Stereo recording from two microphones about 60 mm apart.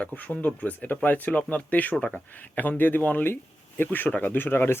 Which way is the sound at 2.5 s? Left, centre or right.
Left.